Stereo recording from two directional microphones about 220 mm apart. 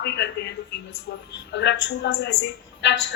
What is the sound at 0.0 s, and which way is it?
A woman's voice, 50° left (ahead or behind).